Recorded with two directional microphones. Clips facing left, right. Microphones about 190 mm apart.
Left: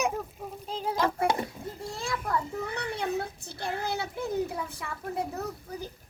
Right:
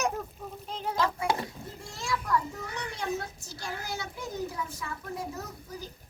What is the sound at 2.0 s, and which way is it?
A child's voice, 55° left (ahead or behind).